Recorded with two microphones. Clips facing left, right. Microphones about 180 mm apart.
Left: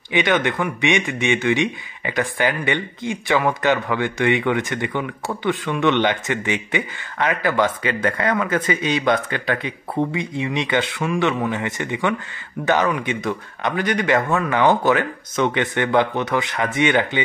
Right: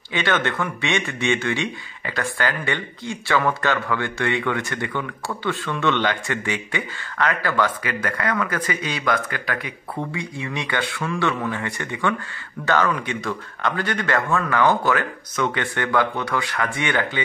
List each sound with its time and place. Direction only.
0.1 s speech: 15° left (ahead or behind)